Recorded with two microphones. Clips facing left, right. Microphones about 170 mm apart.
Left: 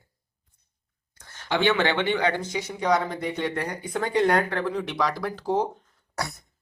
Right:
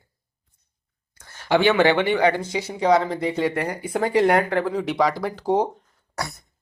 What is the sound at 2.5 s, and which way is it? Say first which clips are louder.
Speech: right 5 dB; 30° right (ahead or behind).